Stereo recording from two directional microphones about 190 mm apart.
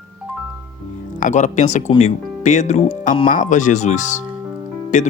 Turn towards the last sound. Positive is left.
turn(degrees=40)  # may be behind; listen again after turning